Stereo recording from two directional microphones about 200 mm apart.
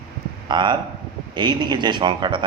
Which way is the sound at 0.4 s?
20° right (ahead or behind).